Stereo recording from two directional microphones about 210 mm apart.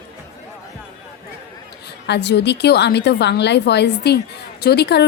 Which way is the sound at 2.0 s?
55° left (ahead or behind).